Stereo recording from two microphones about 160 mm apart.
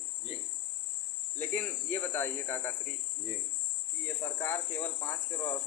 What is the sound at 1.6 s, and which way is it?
Speech, 15° left (ahead or behind).